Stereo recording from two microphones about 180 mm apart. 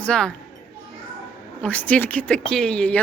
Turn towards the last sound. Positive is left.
turn(degrees=5)  # may be behind; listen again after turning